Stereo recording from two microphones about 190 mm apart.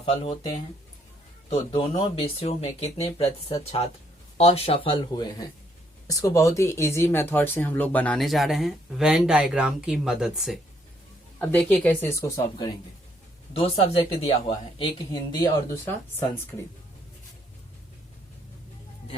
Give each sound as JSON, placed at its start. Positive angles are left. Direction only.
{"t": 0.0, "sound": "speech", "side_deg": 30}
{"t": 1.5, "sound": "speech", "side_deg": 30}
{"t": 11.3, "sound": "speech", "side_deg": 10}
{"t": 14.3, "sound": "speech", "side_deg": 25}